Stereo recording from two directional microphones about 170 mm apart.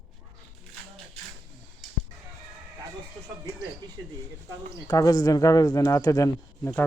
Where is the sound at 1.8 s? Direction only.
Centre (ahead or behind).